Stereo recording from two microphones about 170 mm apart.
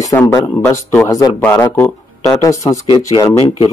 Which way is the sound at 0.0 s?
20° left (ahead or behind).